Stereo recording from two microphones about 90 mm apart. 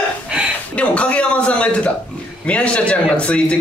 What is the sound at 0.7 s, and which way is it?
Speech, 15° left (ahead or behind).